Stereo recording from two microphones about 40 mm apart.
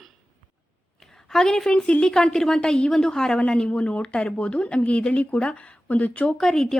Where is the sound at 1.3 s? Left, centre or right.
Centre.